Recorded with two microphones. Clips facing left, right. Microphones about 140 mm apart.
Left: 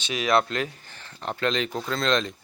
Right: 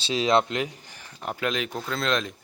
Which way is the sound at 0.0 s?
25° right (ahead or behind).